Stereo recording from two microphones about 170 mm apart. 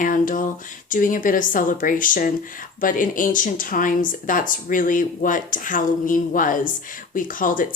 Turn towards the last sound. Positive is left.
turn(degrees=55)  # may be behind; listen again after turning